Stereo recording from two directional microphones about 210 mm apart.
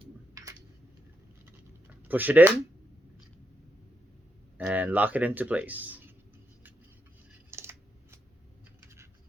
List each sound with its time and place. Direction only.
0.0 s a sound: 15° right (ahead or behind)
2.0 s speech: 10° right (ahead or behind)
4.5 s speech: 10° right (ahead or behind)
7.5 s typing: 10° right (ahead or behind)